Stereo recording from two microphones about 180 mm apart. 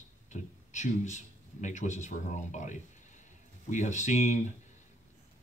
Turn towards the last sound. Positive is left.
turn(degrees=40)  # may be behind; listen again after turning